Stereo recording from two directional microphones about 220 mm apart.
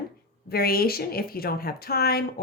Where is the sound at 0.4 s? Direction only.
45° left (ahead or behind).